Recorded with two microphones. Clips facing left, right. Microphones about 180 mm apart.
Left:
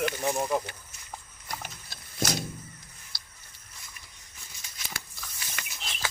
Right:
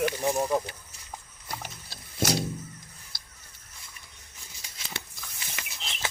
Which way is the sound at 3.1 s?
50° right (ahead or behind).